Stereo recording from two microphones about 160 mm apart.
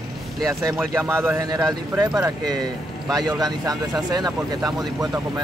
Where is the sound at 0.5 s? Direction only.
20° right (ahead or behind).